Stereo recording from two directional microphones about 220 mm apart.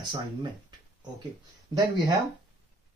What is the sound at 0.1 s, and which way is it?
Speech, 20° right (ahead or behind).